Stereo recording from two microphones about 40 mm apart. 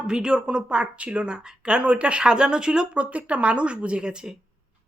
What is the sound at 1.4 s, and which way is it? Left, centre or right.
Speech, centre.